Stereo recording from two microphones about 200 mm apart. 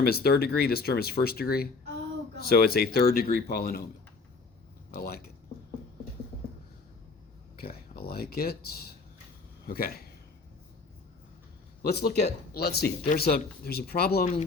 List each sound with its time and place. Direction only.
0.0 s speech: 50° left (ahead or behind)
4.9 s speech: 50° left (ahead or behind)
7.5 s speech: 50° left (ahead or behind)
11.8 s speech: 50° left (ahead or behind)